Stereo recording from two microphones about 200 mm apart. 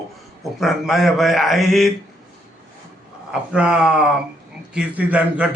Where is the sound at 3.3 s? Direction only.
5° right (ahead or behind).